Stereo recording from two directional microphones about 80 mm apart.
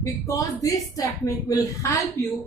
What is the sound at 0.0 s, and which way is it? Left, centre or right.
A woman's voice, left.